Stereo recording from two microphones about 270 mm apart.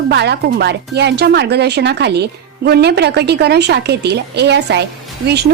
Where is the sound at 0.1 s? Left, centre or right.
Right.